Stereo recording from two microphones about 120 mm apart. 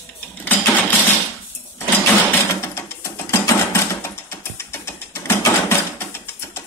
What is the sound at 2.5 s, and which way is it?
Sewing machine, 20° left (ahead or behind).